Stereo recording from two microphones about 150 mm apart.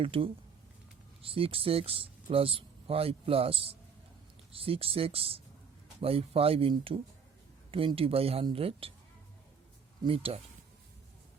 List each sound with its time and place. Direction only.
0.0 s speech: 35° right (ahead or behind)
10.0 s speech: 40° right (ahead or behind)